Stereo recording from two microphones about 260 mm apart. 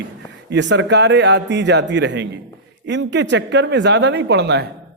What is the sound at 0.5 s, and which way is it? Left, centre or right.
A man's voice, right.